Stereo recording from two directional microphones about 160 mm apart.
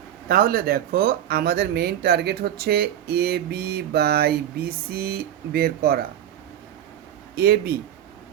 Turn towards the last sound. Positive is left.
turn(degrees=-80)